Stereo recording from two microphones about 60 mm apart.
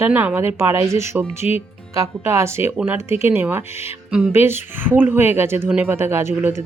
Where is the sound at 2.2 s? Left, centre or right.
Right.